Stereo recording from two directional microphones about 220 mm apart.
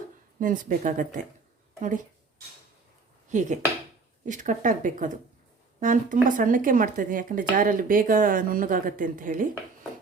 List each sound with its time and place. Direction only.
0.3 s speech: 35° right (ahead or behind)
3.2 s speech: 35° right (ahead or behind)